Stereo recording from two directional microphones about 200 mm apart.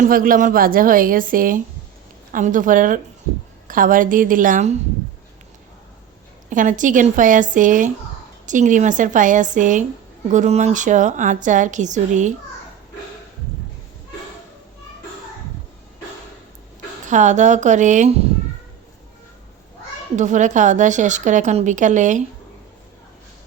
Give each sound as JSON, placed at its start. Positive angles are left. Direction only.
{"t": 0.0, "sound": "a woman's voice", "side_deg": -45}
{"t": 6.5, "sound": "a woman's voice", "side_deg": -40}
{"t": 17.1, "sound": "a woman's voice", "side_deg": -35}
{"t": 20.1, "sound": "a woman's voice", "side_deg": -35}